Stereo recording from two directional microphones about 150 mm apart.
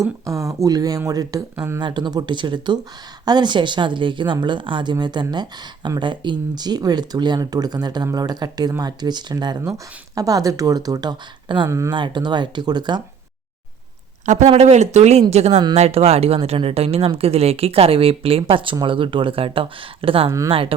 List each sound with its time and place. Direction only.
0.0 s a woman's voice: 20° right (ahead or behind)
1.8 s a woman's voice: 30° right (ahead or behind)
14.3 s speech: 50° right (ahead or behind)